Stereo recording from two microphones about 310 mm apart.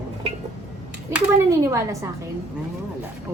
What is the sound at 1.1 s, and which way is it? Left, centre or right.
Speech, centre.